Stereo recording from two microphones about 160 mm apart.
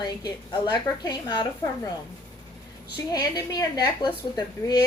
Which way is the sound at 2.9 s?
25° left (ahead or behind).